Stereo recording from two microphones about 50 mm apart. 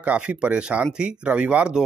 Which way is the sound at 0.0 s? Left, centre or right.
Right.